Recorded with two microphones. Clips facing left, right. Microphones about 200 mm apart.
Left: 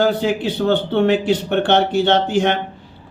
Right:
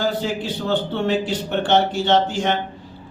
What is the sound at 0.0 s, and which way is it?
A man's voice, 60° left (ahead or behind).